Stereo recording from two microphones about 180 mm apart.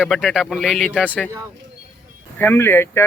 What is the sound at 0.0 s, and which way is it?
Speech, centre (ahead or behind).